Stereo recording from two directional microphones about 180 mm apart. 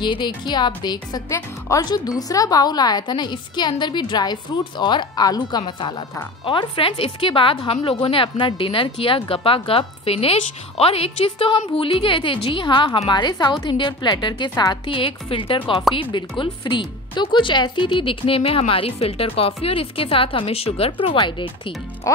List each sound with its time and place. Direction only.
0.0 s a woman's voice: 25° left (ahead or behind)
22.0 s speech: 15° left (ahead or behind)